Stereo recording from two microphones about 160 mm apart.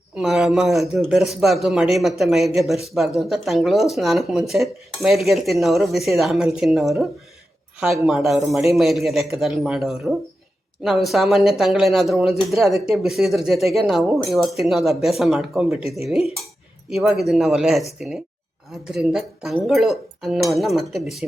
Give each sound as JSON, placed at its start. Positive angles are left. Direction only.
{"t": 0.2, "sound": "speech", "side_deg": 0}
{"t": 8.0, "sound": "speech", "side_deg": 0}
{"t": 15.8, "sound": "speech", "side_deg": 40}
{"t": 16.9, "sound": "speech", "side_deg": -5}